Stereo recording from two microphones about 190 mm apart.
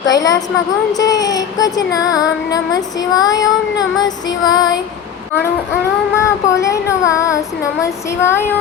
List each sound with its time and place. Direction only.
0.0 s child singing: 20° left (ahead or behind)
6.1 s child singing: 15° left (ahead or behind)